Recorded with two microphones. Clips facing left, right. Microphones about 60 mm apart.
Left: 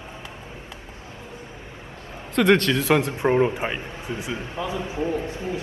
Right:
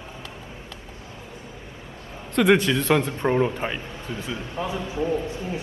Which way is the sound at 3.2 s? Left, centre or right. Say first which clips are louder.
Left 2 dB; centre.